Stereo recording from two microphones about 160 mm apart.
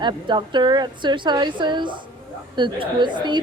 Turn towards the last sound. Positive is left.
turn(degrees=-30)  # may be behind; listen again after turning